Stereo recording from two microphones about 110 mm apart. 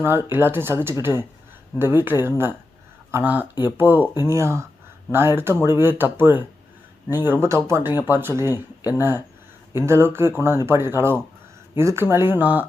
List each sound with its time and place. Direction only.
0.0 s speech: 20° right (ahead or behind)